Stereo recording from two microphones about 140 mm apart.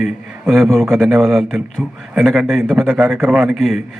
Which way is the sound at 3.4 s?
Centre (ahead or behind).